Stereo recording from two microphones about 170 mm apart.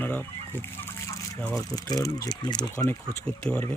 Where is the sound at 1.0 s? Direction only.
15° left (ahead or behind).